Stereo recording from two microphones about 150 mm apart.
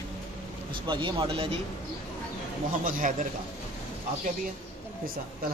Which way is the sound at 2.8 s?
65° right (ahead or behind).